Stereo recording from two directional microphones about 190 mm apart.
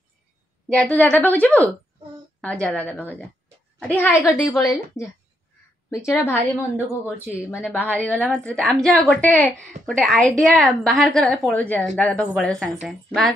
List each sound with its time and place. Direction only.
0.7 s a woman's voice: 5° left (ahead or behind)
7.3 s a woman's voice: 5° right (ahead or behind)
7.8 s a woman's voice: 10° left (ahead or behind)